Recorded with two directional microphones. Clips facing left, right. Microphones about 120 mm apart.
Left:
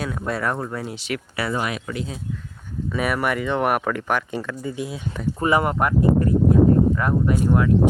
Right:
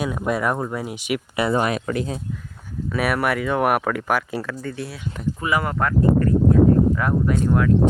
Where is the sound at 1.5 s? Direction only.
40° right (ahead or behind).